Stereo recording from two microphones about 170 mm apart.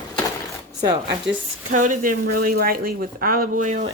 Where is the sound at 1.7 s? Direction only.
45° right (ahead or behind).